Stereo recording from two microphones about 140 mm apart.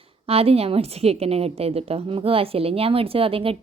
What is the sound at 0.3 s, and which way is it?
A woman's voice, 45° right (ahead or behind).